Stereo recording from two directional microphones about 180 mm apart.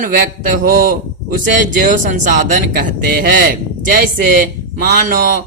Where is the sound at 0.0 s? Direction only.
50° right (ahead or behind).